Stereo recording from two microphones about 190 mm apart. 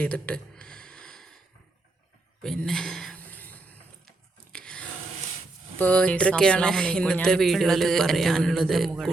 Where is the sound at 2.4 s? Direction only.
5° left (ahead or behind).